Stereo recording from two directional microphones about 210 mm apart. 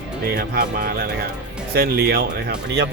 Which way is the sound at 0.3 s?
45° right (ahead or behind).